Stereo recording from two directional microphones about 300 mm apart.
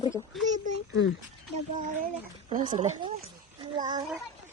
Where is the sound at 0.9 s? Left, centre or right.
Left.